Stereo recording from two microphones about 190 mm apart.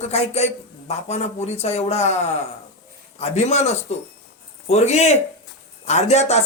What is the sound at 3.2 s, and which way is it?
Speech, 35° left (ahead or behind).